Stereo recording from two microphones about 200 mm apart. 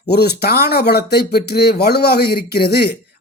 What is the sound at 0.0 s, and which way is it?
Speech, 55° left (ahead or behind).